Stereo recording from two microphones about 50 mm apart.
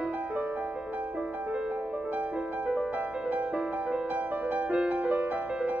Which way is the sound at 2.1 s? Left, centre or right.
Right.